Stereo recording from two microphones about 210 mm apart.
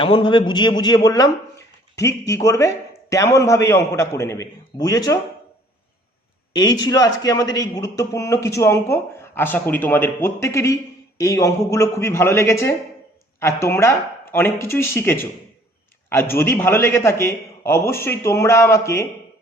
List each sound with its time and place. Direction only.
0.0 s a man's voice: 20° left (ahead or behind)
6.8 s a man's voice: 15° left (ahead or behind)